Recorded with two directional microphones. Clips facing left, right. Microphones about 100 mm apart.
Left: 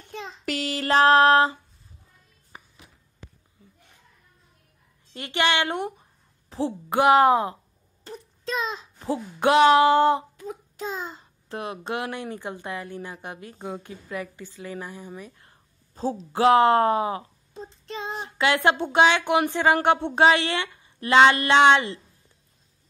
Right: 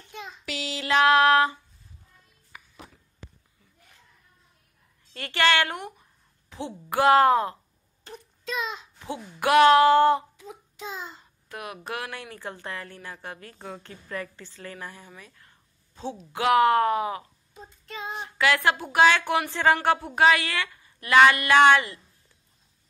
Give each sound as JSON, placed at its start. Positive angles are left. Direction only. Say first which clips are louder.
{"t": 0.5, "sound": "a sound", "louder": "left 3 dB", "side_deg": 50}
{"t": 5.1, "sound": "speech", "louder": "right 1 dB", "side_deg": 20}
{"t": 8.1, "sound": "a child's voice", "louder": "left 3 dB", "side_deg": 35}
{"t": 9.4, "sound": "speech", "louder": "even", "side_deg": 20}
{"t": 10.3, "sound": "child singing", "louder": "left 7 dB", "side_deg": 50}
{"t": 11.4, "sound": "speech", "louder": "left 5 dB", "side_deg": 30}
{"t": 15.4, "sound": "a sound", "louder": "left 2 dB", "side_deg": 40}
{"t": 16.3, "sound": "speech", "louder": "left 3 dB", "side_deg": 30}